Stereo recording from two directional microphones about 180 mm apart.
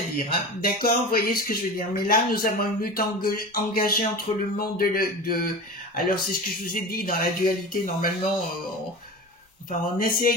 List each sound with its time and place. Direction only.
0.1 s a sound: 55° left (ahead or behind)
5.9 s speech: 55° left (ahead or behind)
9.7 s speech: 50° left (ahead or behind)